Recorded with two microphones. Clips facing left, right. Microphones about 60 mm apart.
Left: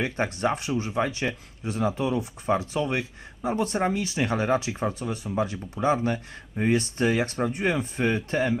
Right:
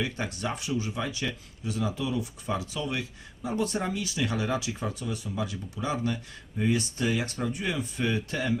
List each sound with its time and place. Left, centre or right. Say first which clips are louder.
0.0 s speech: left 6 dB; left